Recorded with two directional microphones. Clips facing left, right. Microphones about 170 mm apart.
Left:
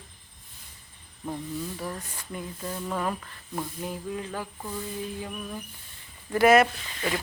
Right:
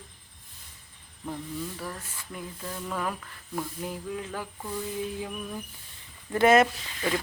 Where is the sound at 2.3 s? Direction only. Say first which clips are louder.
Left 3 dB; 15° left (ahead or behind).